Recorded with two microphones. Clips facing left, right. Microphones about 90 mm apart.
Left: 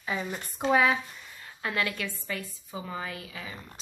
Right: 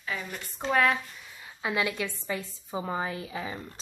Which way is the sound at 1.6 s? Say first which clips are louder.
Right 2 dB; 15° right (ahead or behind).